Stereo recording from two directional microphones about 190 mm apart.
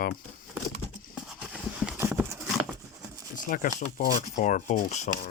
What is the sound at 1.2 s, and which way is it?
Horse, 5° right (ahead or behind).